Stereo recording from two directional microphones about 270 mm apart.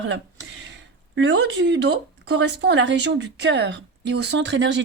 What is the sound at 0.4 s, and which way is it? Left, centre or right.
Speech, right.